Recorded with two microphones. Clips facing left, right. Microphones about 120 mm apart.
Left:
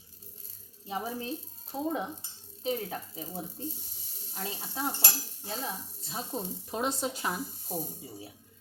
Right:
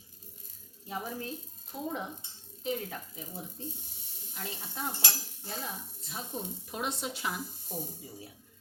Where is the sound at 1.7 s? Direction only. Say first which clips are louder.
Left 4 dB; 35° left (ahead or behind).